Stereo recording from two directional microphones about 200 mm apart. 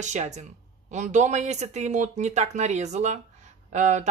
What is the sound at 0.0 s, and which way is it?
A man's voice, 35° right (ahead or behind).